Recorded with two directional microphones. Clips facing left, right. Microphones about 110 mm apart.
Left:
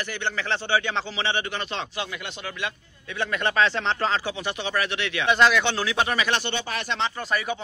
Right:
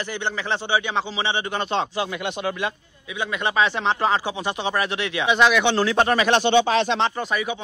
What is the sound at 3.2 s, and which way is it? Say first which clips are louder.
A man's voice: right 1 dB; 10° right (ahead or behind).